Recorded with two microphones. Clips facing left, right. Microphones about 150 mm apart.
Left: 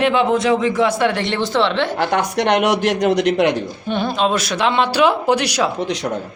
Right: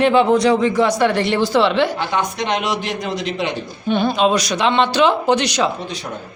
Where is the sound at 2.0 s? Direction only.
65° left (ahead or behind).